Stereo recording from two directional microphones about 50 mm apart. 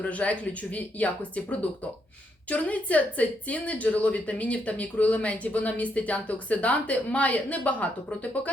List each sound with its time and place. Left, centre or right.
0.0 s speech: left